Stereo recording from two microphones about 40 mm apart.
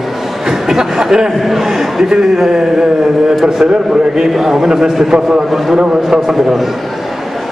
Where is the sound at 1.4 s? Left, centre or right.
Centre.